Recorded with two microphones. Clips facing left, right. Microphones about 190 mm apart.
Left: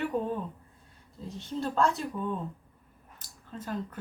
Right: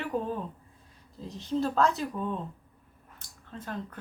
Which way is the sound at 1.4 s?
Centre (ahead or behind).